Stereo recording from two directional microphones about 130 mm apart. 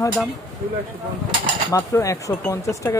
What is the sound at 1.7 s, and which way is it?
Speech, 25° left (ahead or behind).